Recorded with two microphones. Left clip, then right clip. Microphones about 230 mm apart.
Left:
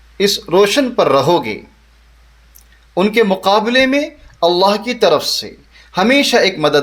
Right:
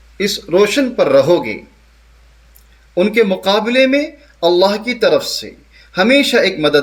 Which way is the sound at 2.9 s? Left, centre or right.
Left.